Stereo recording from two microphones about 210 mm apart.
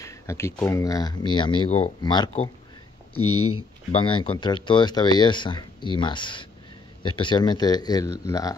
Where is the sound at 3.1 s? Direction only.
90° left.